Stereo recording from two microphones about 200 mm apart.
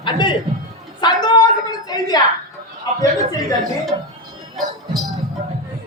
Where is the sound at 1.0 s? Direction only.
20° left (ahead or behind).